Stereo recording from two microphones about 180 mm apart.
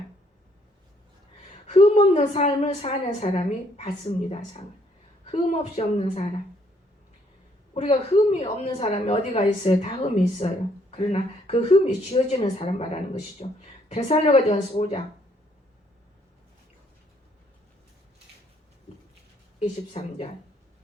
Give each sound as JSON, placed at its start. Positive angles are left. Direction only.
{"t": 1.6, "sound": "a woman's voice", "side_deg": 35}
{"t": 7.7, "sound": "a woman's voice", "side_deg": 35}
{"t": 19.5, "sound": "a woman's voice", "side_deg": 30}